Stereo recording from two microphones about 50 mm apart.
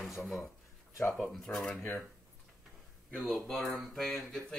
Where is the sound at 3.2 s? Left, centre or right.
Centre.